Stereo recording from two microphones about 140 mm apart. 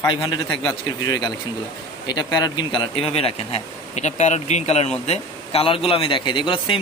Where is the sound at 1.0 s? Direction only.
30° left (ahead or behind).